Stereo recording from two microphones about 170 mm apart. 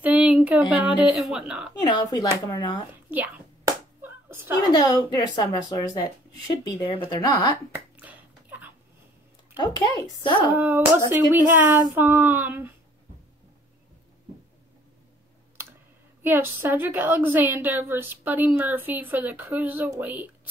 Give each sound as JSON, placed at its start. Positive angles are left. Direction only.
{"t": 0.0, "sound": "speech", "side_deg": -10}
{"t": 1.8, "sound": "speech", "side_deg": 20}
{"t": 3.1, "sound": "a sound", "side_deg": -10}
{"t": 4.6, "sound": "speech", "side_deg": 20}
{"t": 7.7, "sound": "finger snapping", "side_deg": -10}
{"t": 9.6, "sound": "speech", "side_deg": 25}
{"t": 10.5, "sound": "a woman's voice", "side_deg": -10}
{"t": 16.2, "sound": "a woman's voice", "side_deg": -15}